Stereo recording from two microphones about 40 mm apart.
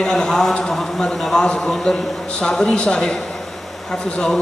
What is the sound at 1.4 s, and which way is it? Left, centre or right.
Speech, left.